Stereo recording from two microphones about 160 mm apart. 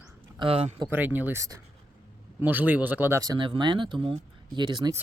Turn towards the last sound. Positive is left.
turn(degrees=-25)  # may be behind; listen again after turning